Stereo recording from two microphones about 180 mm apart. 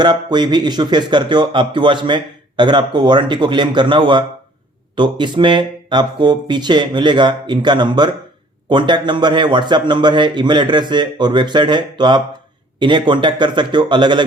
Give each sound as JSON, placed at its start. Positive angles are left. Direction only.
{"t": 0.0, "sound": "speech", "side_deg": -25}